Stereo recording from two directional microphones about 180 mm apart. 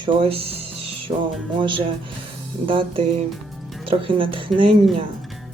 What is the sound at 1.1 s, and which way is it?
Music, 30° right (ahead or behind).